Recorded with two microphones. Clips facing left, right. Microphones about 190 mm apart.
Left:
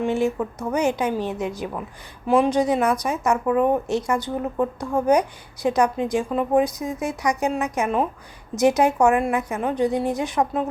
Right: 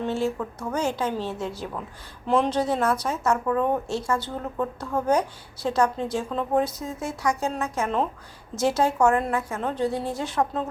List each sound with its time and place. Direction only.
0.0 s a woman's voice: 15° left (ahead or behind)